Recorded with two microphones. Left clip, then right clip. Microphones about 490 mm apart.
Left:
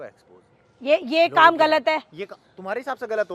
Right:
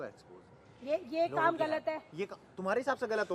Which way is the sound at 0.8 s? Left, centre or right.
Left.